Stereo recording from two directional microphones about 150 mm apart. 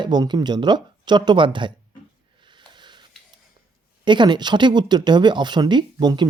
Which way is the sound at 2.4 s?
30° right (ahead or behind).